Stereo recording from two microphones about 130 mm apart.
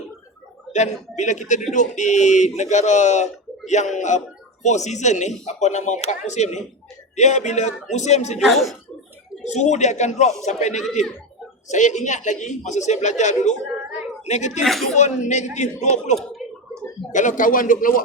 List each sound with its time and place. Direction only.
0.7 s speech: 65° left (ahead or behind)
8.4 s speech: centre (ahead or behind)
9.4 s speech: 60° left (ahead or behind)
14.6 s speech: centre (ahead or behind)
14.9 s speech: 65° left (ahead or behind)
17.1 s a man's voice: 75° left (ahead or behind); by 18.0 s 90° left